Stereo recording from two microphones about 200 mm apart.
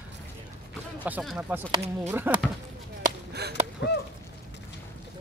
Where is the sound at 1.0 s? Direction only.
5° right (ahead or behind).